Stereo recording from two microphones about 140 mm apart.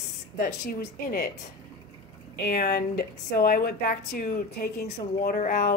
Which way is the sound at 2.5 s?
90° left.